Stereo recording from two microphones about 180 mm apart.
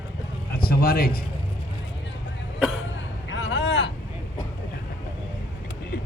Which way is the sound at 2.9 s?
90° left.